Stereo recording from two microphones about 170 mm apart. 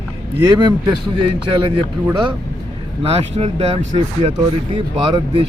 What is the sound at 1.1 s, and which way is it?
A man's voice, 30° right (ahead or behind).